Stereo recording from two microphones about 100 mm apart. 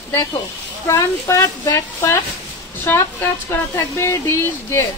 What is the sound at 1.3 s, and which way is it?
Speech, 30° left (ahead or behind).